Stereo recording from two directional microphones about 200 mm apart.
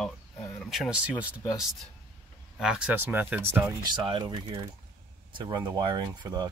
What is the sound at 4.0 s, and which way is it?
Speech, 25° right (ahead or behind).